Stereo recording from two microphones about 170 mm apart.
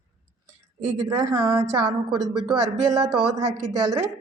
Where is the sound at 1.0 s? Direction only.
20° right (ahead or behind).